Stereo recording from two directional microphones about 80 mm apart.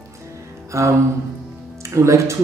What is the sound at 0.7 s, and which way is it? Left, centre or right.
Music, right.